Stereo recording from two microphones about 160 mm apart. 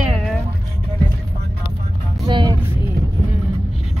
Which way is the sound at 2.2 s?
30° right (ahead or behind).